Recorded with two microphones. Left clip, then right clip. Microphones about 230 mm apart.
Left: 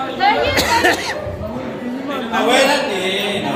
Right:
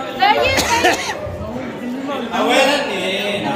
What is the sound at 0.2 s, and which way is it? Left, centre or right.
Chatter, right.